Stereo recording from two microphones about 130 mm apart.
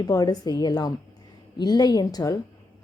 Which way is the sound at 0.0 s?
30° left (ahead or behind).